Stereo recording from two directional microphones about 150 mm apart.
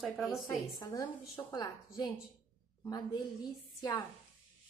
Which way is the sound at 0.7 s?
25° left (ahead or behind).